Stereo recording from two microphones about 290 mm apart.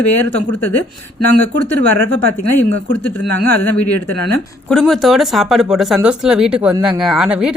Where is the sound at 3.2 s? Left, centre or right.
Left.